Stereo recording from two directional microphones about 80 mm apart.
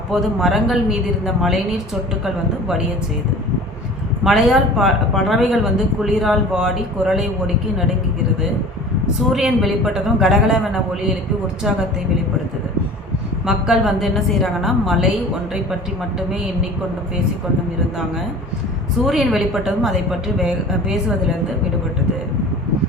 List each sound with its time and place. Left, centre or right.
0.1 s a woman's voice: centre
4.2 s a woman's voice: centre
9.3 s a woman's voice: centre
13.4 s a woman's voice: centre
19.0 s a woman's voice: centre